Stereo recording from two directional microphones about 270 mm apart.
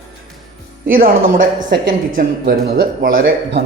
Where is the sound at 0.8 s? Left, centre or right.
Right.